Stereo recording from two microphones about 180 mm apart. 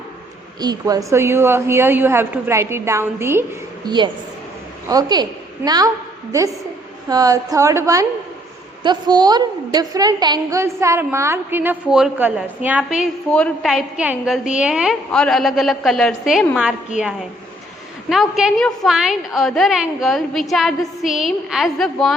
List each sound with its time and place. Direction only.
0.6 s a woman's voice: 20° right (ahead or behind)
3.8 s a woman's voice: 25° right (ahead or behind)
7.1 s a woman's voice: 20° right (ahead or behind); by 16.7 s 5° right (ahead or behind)
18.1 s a woman's voice: centre (ahead or behind)